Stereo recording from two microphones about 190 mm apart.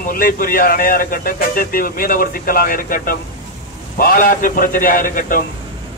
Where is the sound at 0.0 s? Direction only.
50° left (ahead or behind).